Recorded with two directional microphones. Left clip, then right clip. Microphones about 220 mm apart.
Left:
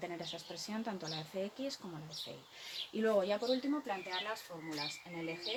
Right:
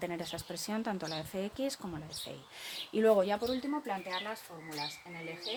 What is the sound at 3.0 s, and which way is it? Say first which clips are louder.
Speech: right 6 dB; 50° right (ahead or behind).